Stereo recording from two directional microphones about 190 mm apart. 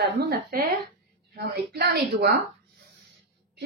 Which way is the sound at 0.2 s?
50° right (ahead or behind).